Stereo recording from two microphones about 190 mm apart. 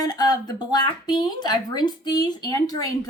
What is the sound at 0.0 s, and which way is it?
Speech, 20° left (ahead or behind).